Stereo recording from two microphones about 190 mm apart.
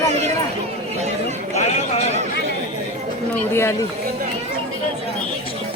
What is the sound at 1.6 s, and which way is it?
Speech, 35° left (ahead or behind).